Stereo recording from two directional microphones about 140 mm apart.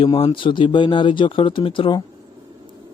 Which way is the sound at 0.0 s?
40° left (ahead or behind).